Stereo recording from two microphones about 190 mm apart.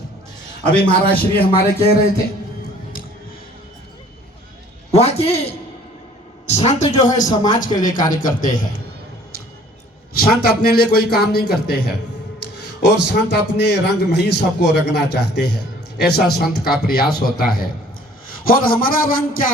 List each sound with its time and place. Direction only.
0.6 s a man's voice: 5° left (ahead or behind)
1.4 s speech: 55° left (ahead or behind)
4.9 s a sound: 35° left (ahead or behind)
6.5 s speech: 35° left (ahead or behind)
10.2 s a man's voice: 50° left (ahead or behind)